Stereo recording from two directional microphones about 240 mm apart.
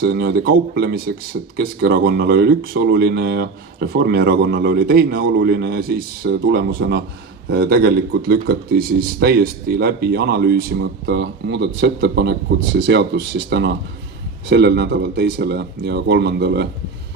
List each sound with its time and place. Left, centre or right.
0.0 s speech: right